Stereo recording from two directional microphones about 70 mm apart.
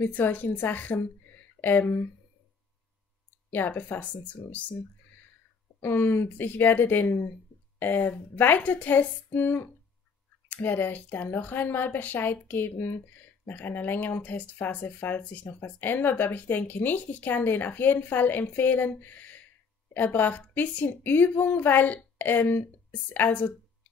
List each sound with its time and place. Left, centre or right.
0.0 s speech: left
3.4 s speech: left
5.8 s speech: left